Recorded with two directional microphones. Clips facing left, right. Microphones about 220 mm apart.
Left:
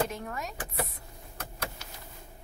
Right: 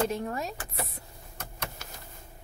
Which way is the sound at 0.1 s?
30° right (ahead or behind).